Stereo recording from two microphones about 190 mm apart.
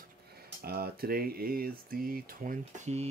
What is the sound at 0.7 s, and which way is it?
Speech, 55° right (ahead or behind).